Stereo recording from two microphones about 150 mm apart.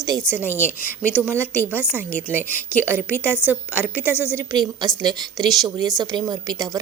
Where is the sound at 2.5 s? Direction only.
15° right (ahead or behind).